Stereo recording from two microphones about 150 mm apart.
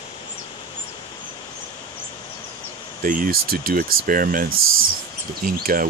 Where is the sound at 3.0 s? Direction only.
65° right (ahead or behind).